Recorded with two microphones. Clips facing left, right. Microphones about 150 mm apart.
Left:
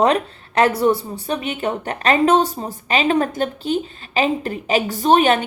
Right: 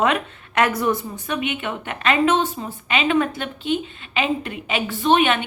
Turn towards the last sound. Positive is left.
turn(degrees=40)  # may be behind; listen again after turning